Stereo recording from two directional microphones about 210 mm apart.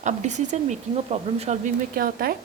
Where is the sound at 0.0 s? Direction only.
35° right (ahead or behind).